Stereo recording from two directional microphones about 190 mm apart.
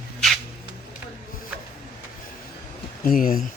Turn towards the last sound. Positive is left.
turn(degrees=45)  # may be behind; listen again after turning